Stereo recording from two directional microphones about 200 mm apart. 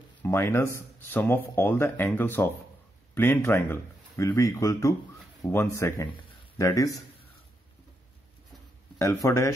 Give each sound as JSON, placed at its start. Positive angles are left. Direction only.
{"t": 0.2, "sound": "speech", "side_deg": 10}
{"t": 8.9, "sound": "speech", "side_deg": 15}